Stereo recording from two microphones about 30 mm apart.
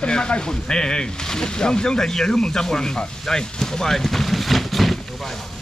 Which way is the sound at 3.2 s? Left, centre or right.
Centre.